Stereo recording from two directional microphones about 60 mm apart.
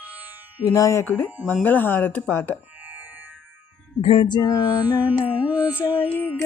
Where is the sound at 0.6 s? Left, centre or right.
Left.